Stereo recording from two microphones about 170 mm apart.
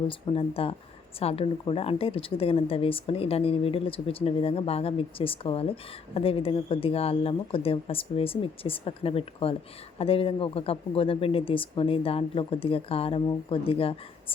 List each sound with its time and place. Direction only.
0.1 s speech: 30° left (ahead or behind)